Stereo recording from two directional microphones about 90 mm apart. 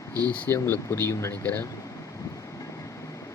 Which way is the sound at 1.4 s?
20° left (ahead or behind).